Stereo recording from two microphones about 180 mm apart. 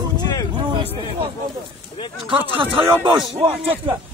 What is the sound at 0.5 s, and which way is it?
Speech, 30° right (ahead or behind).